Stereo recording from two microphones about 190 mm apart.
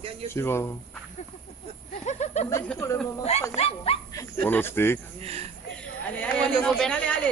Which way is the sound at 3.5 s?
30° left (ahead or behind).